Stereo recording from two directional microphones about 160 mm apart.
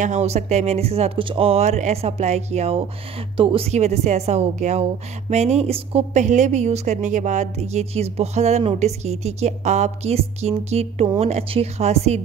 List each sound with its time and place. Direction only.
0.0 s a woman's voice: 45° right (ahead or behind)